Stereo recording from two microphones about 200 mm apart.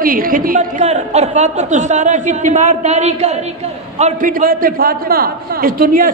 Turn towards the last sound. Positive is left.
turn(degrees=-45)  # may be behind; listen again after turning